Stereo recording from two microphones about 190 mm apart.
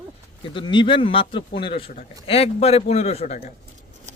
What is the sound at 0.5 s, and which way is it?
Speech, 25° left (ahead or behind).